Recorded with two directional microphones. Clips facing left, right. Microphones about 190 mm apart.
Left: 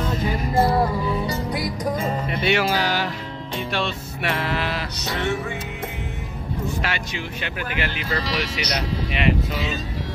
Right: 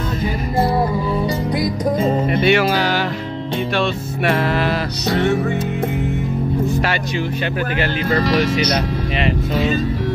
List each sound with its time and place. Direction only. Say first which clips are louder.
2.4 s music: right 4 dB; 60° right (ahead or behind)
3.7 s music: right 6 dB; 50° right (ahead or behind)
8.1 s music: right 12 dB; 55° right (ahead or behind)